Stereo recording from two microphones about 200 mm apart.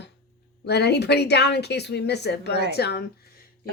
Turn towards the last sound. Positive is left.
turn(degrees=55)  # may be behind; listen again after turning